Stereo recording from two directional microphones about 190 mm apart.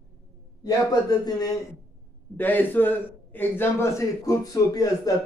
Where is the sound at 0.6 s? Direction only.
20° left (ahead or behind).